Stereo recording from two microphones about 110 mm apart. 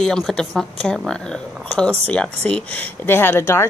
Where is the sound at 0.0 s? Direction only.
5° left (ahead or behind).